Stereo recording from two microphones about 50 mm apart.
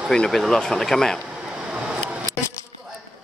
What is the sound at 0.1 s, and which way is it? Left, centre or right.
Speech, centre.